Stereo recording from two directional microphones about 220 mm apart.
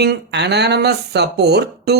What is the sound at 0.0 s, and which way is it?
Speech, 50° right (ahead or behind).